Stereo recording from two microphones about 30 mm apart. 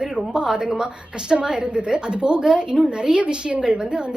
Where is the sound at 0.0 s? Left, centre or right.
Right.